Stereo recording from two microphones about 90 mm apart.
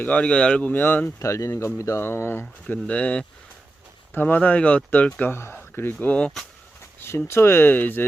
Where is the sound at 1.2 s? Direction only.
35° left (ahead or behind).